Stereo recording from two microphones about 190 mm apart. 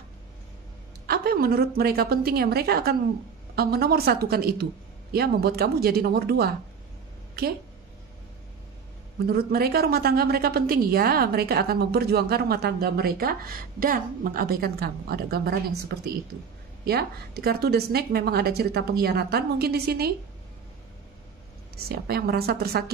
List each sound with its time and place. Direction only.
1.0 s a woman's voice: 55° right (ahead or behind)
9.3 s a woman's voice: 55° right (ahead or behind)
16.8 s a woman's voice: 55° right (ahead or behind)
21.7 s a woman's voice: 55° right (ahead or behind)